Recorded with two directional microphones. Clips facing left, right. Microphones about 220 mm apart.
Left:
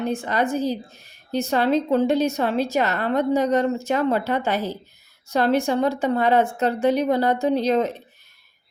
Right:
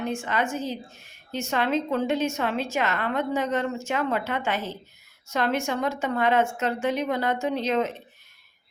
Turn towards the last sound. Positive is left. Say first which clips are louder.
# left 5 dB
turn(degrees=35)  # may be behind; listen again after turning